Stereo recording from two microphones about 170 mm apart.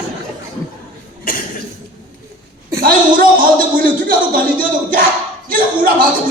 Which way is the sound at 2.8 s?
55° right (ahead or behind).